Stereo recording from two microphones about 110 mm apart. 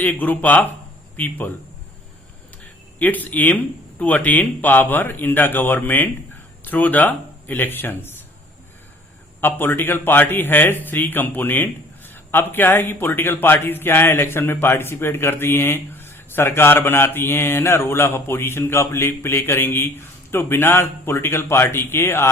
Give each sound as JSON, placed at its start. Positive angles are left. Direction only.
{"t": 0.0, "sound": "speech", "side_deg": 15}
{"t": 3.0, "sound": "speech", "side_deg": 15}
{"t": 9.4, "sound": "a man's voice", "side_deg": 20}